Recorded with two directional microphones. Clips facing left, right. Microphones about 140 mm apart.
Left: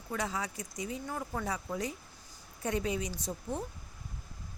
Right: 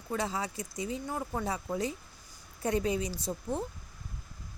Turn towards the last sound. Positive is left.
turn(degrees=-30)  # may be behind; listen again after turning